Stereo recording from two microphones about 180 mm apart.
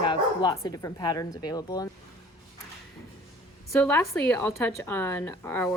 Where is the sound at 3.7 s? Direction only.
10° left (ahead or behind).